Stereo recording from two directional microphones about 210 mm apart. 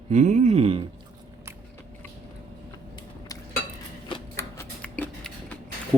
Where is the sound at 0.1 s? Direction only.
35° right (ahead or behind).